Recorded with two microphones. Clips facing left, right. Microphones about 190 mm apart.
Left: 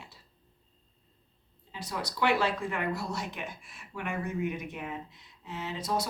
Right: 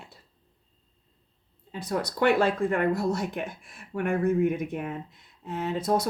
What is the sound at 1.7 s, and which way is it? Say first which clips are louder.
Speech: right 7 dB; 50° right (ahead or behind).